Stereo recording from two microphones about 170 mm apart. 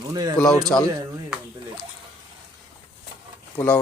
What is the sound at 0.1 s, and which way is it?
Speech, 25° right (ahead or behind).